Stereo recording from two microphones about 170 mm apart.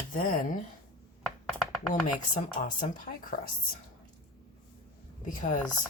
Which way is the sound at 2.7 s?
50° left (ahead or behind).